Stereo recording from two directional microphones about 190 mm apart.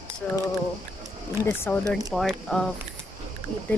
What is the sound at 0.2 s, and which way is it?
Speech, 5° left (ahead or behind).